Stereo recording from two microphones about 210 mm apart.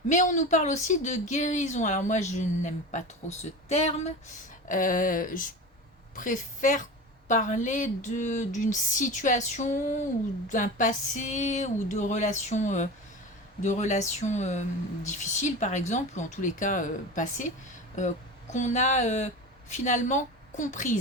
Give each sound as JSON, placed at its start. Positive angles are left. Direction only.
{"t": 0.1, "sound": "a woman's voice", "side_deg": 35}
{"t": 18.5, "sound": "a woman's voice", "side_deg": 35}